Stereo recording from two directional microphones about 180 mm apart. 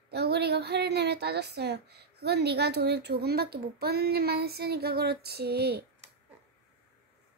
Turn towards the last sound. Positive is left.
turn(degrees=-65)  # may be behind; listen again after turning